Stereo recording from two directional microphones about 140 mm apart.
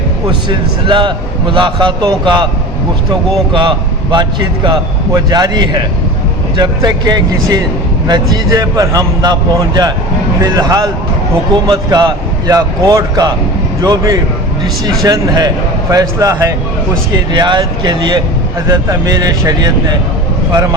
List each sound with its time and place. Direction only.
0.4 s a man's voice: 35° right (ahead or behind)
3.5 s a man's voice: 35° right (ahead or behind)
17.3 s a man's voice: 30° right (ahead or behind)